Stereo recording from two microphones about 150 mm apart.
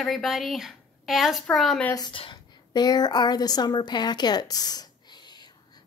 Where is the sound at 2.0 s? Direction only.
35° left (ahead or behind).